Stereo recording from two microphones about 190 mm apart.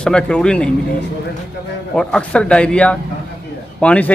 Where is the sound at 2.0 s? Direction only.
5° left (ahead or behind).